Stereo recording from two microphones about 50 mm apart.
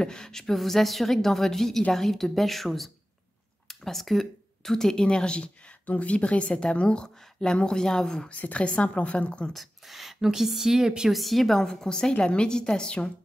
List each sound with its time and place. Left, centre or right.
0.0 s a woman's voice: centre
8.3 s a woman's voice: left
9.5 s a woman's voice: centre
11.1 s a woman's voice: centre
11.6 s a woman's voice: centre